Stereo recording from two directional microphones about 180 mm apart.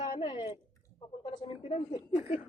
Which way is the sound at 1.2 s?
25° left (ahead or behind).